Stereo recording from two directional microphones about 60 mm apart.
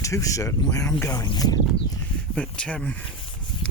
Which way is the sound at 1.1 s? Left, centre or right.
Left.